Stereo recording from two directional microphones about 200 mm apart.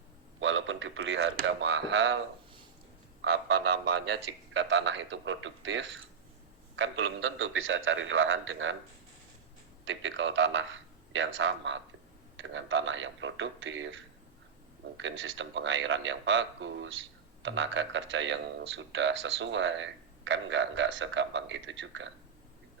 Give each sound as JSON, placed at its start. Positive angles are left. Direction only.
{"t": 0.3, "sound": "a man's voice", "side_deg": -75}
{"t": 3.8, "sound": "a man's voice", "side_deg": -60}
{"t": 9.8, "sound": "a man's voice", "side_deg": -70}